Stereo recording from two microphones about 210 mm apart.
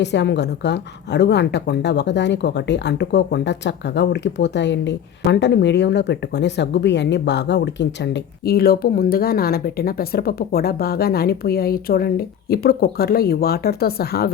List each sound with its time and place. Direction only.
0.0 s a woman's voice: 55° left (ahead or behind)